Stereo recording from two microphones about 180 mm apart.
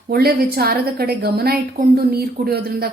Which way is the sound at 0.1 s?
60° right (ahead or behind).